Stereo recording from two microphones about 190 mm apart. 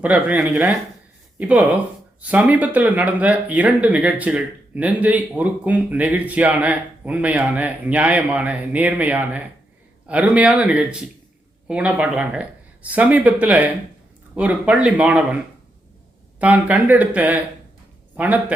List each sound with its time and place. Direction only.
0.0 s speech: 5° right (ahead or behind)
16.4 s speech: 10° right (ahead or behind)